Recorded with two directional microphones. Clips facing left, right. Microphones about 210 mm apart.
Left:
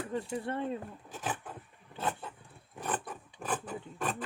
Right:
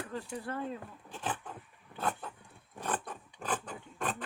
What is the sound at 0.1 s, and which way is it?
Speech, 25° left (ahead or behind).